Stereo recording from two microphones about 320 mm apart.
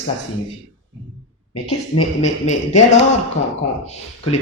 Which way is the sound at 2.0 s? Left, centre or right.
Left.